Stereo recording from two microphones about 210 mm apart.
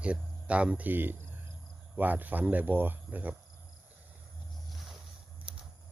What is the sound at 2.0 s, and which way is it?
Speech, 10° right (ahead or behind).